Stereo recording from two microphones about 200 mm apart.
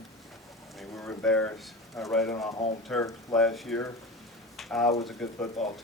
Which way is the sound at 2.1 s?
10° left (ahead or behind).